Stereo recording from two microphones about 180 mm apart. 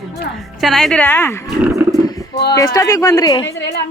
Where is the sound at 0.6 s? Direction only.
Centre (ahead or behind).